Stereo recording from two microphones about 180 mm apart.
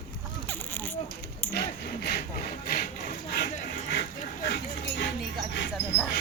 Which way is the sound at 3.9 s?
75° left (ahead or behind).